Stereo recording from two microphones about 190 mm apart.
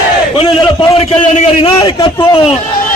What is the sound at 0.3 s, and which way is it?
A man's voice, 25° left (ahead or behind).